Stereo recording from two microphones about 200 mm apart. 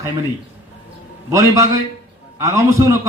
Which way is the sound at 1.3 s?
15° right (ahead or behind).